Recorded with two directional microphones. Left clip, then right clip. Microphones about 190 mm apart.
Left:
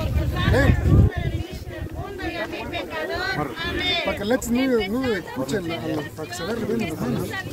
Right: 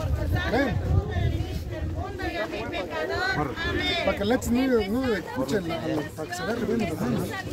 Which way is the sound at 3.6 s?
35° right (ahead or behind).